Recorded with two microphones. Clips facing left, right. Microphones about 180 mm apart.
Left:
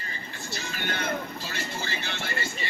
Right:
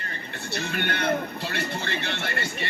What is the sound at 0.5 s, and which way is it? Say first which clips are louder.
Speech: right 5 dB; 60° right (ahead or behind).